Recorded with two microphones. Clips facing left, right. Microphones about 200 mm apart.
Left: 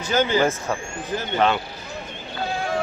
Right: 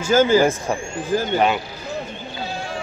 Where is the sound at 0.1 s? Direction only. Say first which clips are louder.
Right 6 dB; 45° right (ahead or behind).